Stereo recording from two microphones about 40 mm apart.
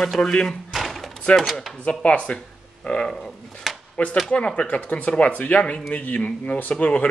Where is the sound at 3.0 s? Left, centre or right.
Centre.